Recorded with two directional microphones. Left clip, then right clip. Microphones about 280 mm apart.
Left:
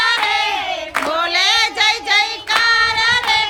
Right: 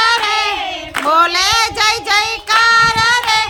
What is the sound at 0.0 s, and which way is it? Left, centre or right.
Child singing, centre.